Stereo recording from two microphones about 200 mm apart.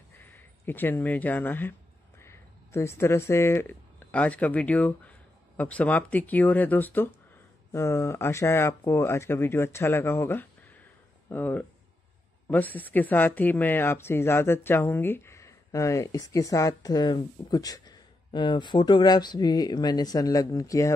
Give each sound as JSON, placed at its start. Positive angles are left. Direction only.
{"t": 0.2, "sound": "speech", "side_deg": 10}